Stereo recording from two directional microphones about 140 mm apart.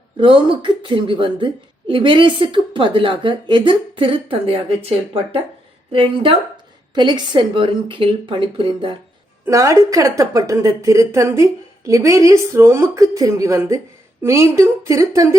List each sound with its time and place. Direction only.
0.2 s speech: 35° right (ahead or behind)
9.5 s a woman's voice: 25° right (ahead or behind)